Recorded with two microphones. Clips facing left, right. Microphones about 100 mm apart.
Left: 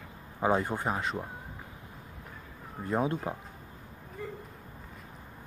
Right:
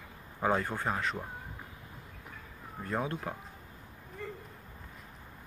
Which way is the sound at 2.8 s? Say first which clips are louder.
Left 5 dB; 20° left (ahead or behind).